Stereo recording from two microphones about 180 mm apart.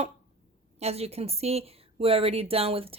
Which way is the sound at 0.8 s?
35° right (ahead or behind).